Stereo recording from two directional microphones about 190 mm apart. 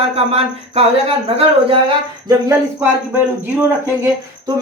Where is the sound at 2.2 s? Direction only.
10° right (ahead or behind).